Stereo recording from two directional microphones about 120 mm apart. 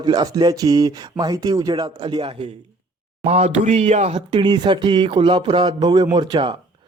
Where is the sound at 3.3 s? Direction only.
60° right (ahead or behind).